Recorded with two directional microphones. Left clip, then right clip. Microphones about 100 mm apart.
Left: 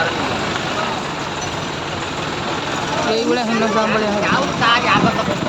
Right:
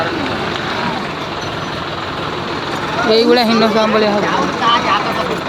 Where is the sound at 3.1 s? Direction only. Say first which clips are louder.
Right 9 dB; 55° right (ahead or behind).